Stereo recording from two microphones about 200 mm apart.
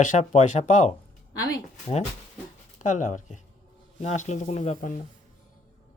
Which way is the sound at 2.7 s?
40° left (ahead or behind).